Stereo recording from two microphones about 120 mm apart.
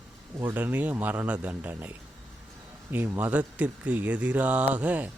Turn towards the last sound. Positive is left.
turn(degrees=-15)  # may be behind; listen again after turning